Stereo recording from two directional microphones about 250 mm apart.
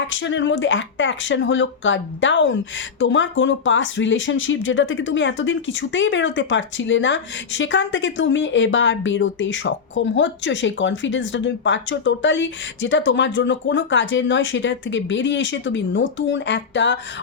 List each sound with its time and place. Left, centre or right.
0.1 s speech: left